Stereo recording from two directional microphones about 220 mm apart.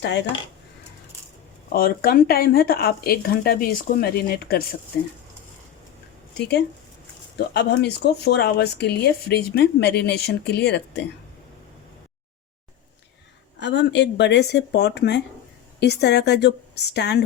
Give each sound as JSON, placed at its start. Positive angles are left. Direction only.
{"t": 0.0, "sound": "speech", "side_deg": 55}
{"t": 1.7, "sound": "speech", "side_deg": 40}
{"t": 7.3, "sound": "speech", "side_deg": 50}
{"t": 13.6, "sound": "speech", "side_deg": 55}